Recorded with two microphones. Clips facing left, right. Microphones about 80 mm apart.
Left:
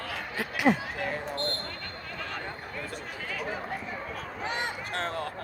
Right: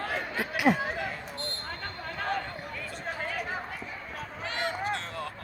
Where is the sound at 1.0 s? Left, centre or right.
Left.